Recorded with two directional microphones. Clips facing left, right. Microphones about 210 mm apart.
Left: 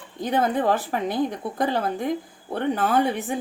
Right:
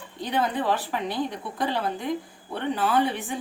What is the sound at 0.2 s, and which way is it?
A woman's voice, 45° left (ahead or behind).